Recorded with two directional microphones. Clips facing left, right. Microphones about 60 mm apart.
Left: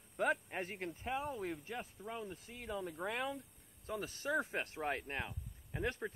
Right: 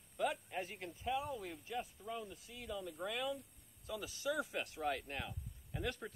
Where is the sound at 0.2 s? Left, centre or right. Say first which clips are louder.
Left 3 dB; left.